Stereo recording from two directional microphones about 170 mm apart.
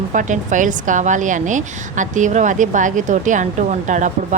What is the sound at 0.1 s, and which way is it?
Speech, 50° right (ahead or behind).